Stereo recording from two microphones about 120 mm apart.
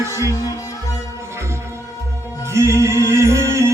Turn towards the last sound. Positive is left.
turn(degrees=-25)  # may be behind; listen again after turning